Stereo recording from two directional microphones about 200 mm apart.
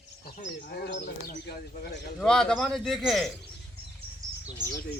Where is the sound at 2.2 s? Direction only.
5° left (ahead or behind).